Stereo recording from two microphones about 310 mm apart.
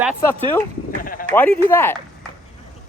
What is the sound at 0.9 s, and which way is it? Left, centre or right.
Sheep, left.